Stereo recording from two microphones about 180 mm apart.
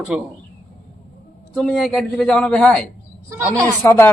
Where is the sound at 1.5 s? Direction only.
Centre (ahead or behind).